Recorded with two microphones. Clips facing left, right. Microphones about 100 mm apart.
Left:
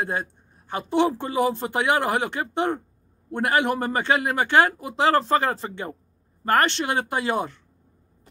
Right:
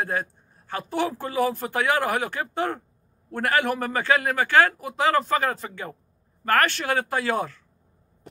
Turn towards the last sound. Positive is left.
turn(degrees=20)  # may be behind; listen again after turning